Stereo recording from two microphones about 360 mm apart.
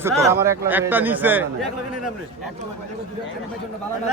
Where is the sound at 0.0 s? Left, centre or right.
Centre.